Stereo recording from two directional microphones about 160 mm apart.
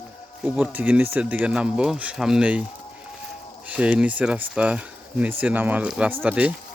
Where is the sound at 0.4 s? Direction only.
10° right (ahead or behind).